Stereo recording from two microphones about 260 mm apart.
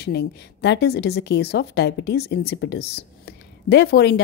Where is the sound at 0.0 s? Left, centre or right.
Left.